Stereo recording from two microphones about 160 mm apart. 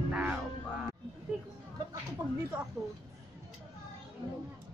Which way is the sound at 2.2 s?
25° right (ahead or behind).